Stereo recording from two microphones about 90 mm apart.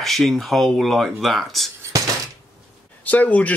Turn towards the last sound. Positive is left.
turn(degrees=15)  # may be behind; listen again after turning